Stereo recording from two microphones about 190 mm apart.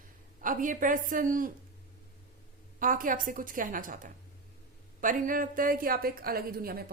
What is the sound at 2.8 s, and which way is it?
A woman's voice, 45° right (ahead or behind).